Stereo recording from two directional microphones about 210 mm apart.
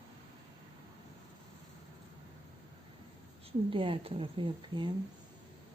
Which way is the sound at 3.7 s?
25° right (ahead or behind).